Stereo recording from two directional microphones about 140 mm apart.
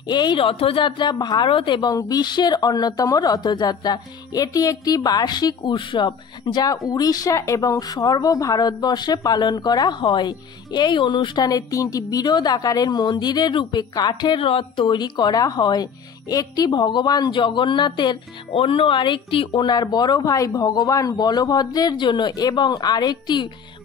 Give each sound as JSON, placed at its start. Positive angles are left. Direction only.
{"t": 0.0, "sound": "speech", "side_deg": 30}